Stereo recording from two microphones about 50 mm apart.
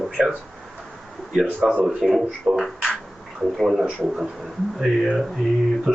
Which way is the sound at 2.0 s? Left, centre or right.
Centre.